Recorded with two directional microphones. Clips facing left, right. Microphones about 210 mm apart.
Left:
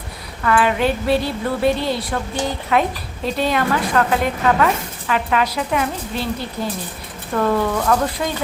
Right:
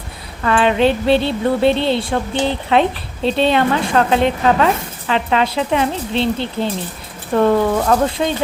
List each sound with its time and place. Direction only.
0.4 s speech: 25° right (ahead or behind)